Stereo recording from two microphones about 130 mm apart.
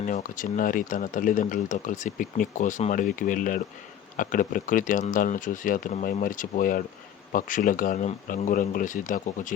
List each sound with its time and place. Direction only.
0.0 s speech: 85° left
2.9 s speech: 85° left